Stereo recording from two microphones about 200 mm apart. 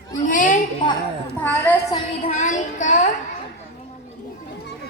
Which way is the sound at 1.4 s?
10° left (ahead or behind).